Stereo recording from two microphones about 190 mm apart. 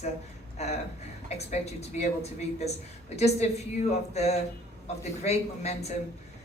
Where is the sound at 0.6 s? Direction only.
35° left (ahead or behind).